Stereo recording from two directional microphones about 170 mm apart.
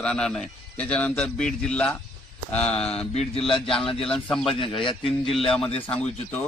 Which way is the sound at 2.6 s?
35° left (ahead or behind).